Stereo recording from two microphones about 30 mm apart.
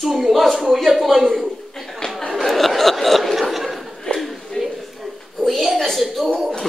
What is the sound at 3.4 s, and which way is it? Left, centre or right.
Laughter, centre.